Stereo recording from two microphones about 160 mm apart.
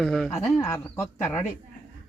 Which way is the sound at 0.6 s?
15° left (ahead or behind).